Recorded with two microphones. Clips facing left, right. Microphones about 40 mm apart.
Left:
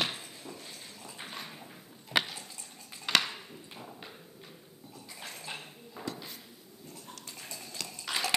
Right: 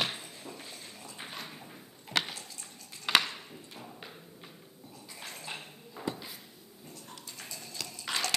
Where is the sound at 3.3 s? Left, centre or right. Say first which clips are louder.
Even; centre.